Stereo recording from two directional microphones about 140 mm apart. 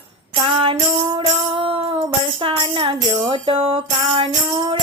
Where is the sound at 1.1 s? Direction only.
40° right (ahead or behind).